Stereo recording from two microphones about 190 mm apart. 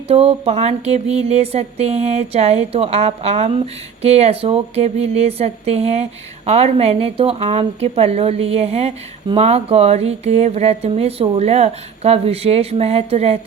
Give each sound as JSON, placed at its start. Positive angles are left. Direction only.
{"t": 0.1, "sound": "speech", "side_deg": -30}